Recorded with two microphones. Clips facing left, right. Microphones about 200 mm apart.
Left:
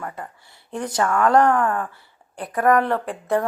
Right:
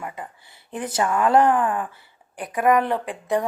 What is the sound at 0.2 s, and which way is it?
Speech, centre (ahead or behind).